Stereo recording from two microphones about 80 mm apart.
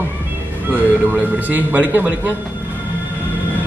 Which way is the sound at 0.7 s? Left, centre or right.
Centre.